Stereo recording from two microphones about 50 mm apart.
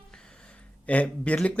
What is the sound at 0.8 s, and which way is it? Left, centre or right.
Speech, left.